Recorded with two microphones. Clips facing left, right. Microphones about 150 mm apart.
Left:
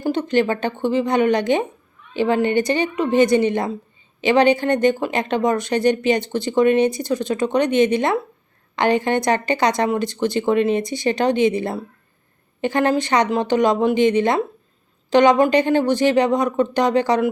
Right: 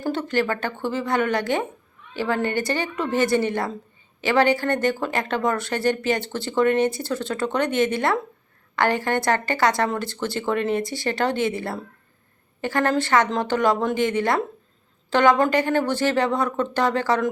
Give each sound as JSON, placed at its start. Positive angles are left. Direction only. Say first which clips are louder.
{"t": 0.0, "sound": "speech", "louder": "left 5 dB", "side_deg": 15}